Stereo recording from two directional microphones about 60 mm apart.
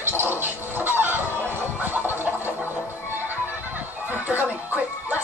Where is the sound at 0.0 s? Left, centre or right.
Right.